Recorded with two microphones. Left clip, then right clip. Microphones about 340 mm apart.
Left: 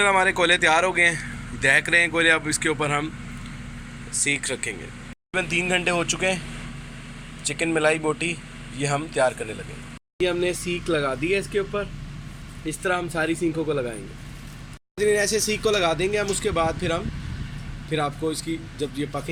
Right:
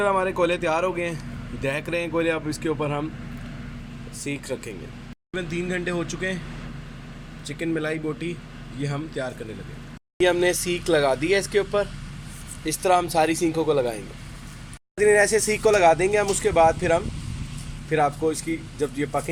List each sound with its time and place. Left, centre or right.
0.0 s speech: centre
4.2 s a man's voice: centre
5.5 s speech: left
5.8 s speech: centre
7.4 s speech: centre
10.2 s speech: centre
14.9 s speech: centre